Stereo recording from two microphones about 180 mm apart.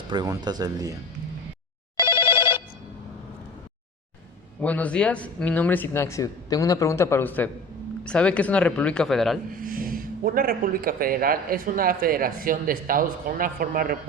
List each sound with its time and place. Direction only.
0.1 s speech: 25° right (ahead or behind)
2.0 s telephone bell ringing: 25° left (ahead or behind)
4.6 s speech: 10° left (ahead or behind)
9.6 s speech: 50° right (ahead or behind)